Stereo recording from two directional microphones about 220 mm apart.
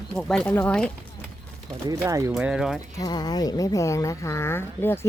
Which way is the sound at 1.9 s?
15° right (ahead or behind).